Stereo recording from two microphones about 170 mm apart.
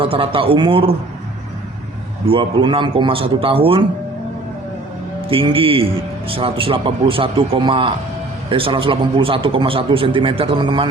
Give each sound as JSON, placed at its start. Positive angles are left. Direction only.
{"t": 0.0, "sound": "a man's voice", "side_deg": -30}
{"t": 2.2, "sound": "a man's voice", "side_deg": -30}
{"t": 5.3, "sound": "a man's voice", "side_deg": -35}